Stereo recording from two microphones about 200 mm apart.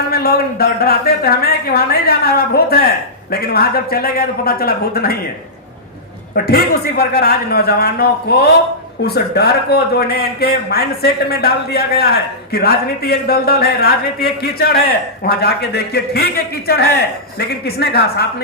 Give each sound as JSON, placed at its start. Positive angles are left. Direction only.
{"t": 0.1, "sound": "a woman's voice", "side_deg": 50}
{"t": 6.3, "sound": "speech", "side_deg": 50}